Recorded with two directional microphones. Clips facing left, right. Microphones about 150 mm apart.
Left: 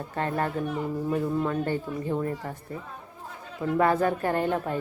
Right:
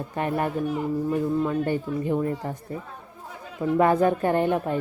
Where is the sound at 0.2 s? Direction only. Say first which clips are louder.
Right 2 dB; 15° right (ahead or behind).